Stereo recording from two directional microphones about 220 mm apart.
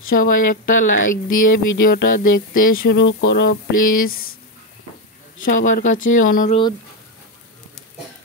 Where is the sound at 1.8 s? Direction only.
40° left (ahead or behind).